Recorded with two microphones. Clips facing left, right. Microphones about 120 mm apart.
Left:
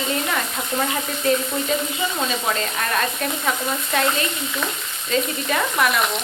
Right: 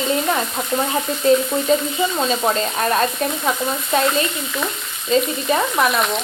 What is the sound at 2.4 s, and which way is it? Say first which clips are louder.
Frying: right 5 dB; 30° right (ahead or behind).